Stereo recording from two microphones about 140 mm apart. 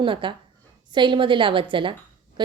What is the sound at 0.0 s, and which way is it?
A woman's voice, 35° right (ahead or behind).